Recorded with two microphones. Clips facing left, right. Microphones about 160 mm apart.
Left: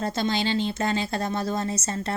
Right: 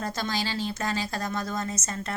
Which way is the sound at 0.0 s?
25° left (ahead or behind).